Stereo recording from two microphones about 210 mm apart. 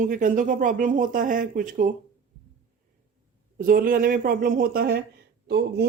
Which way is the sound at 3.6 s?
40° right (ahead or behind).